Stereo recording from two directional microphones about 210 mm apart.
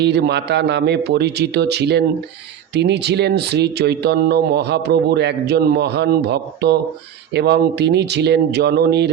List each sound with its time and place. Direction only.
0.0 s speech: 55° right (ahead or behind)